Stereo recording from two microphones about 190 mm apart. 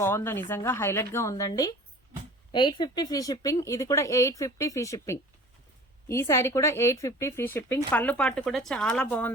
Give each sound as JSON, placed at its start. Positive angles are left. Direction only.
{"t": 0.0, "sound": "speech", "side_deg": 15}